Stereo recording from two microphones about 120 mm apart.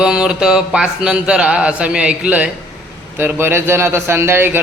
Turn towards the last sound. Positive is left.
turn(degrees=-20)  # may be behind; listen again after turning